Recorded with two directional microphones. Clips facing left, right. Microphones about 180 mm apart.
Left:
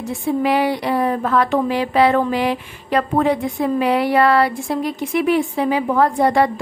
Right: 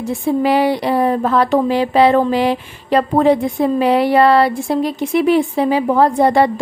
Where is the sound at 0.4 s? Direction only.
30° right (ahead or behind).